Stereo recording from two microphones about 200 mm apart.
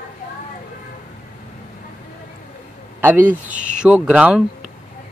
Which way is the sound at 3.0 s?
10° right (ahead or behind).